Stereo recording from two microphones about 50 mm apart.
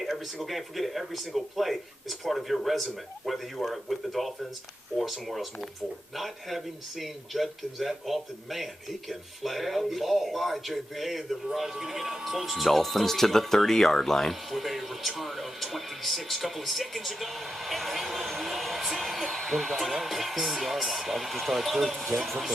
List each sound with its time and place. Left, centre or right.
0.0 s speech: centre